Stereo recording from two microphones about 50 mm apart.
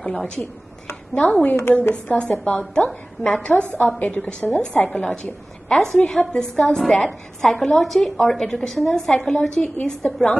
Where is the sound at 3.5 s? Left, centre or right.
Left.